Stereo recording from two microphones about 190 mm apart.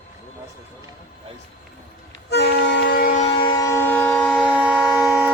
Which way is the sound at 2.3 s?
60° left (ahead or behind).